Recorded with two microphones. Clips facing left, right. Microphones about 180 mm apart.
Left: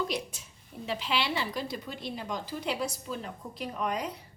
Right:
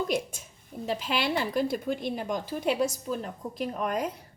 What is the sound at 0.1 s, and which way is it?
A woman's voice, 50° right (ahead or behind).